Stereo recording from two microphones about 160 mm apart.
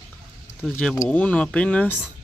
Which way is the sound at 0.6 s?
5° left (ahead or behind).